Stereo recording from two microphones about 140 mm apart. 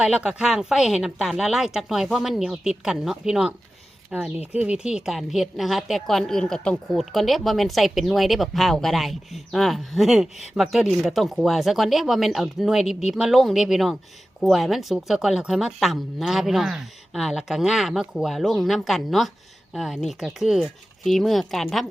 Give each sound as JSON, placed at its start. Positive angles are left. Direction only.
{"t": 0.0, "sound": "a woman's voice", "side_deg": -5}